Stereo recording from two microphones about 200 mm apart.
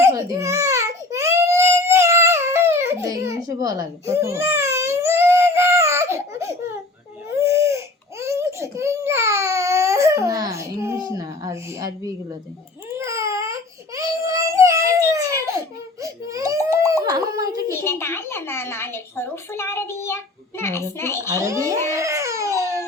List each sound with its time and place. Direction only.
0.0 s baby cry: 15° right (ahead or behind)
7.3 s crying: 15° right (ahead or behind)
8.2 s baby cry: 15° right (ahead or behind)
13.0 s baby cry: 15° right (ahead or behind)
17.1 s a sound: 20° right (ahead or behind)
17.7 s a child's voice: 10° left (ahead or behind)
21.4 s baby cry: 15° right (ahead or behind)